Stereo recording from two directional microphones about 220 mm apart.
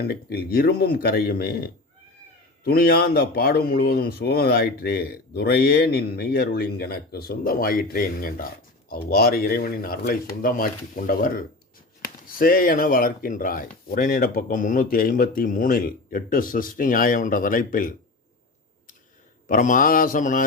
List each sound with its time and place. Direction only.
0.0 s speech: 45° left (ahead or behind)
19.5 s speech: 35° left (ahead or behind)